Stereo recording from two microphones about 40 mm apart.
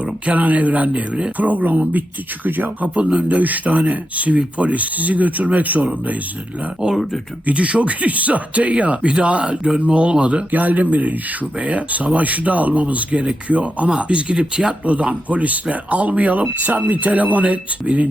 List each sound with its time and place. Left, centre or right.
0.0 s speech: right
2.9 s speech: right
3.2 s speech: right
6.9 s speech: centre
7.4 s speech: right
10.5 s speech: right
14.8 s speech: right